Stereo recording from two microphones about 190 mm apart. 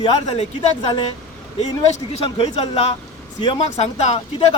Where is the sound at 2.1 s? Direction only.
30° left (ahead or behind).